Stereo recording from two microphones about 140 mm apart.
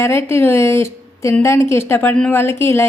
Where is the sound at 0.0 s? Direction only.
20° left (ahead or behind).